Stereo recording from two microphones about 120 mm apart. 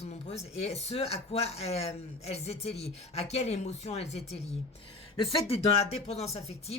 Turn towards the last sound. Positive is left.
turn(degrees=60)  # may be behind; listen again after turning